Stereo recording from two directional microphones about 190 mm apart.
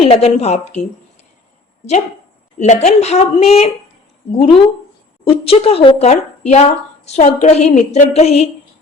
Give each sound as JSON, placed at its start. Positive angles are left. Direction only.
{"t": 0.0, "sound": "a woman's voice", "side_deg": 30}
{"t": 2.6, "sound": "a woman's voice", "side_deg": 35}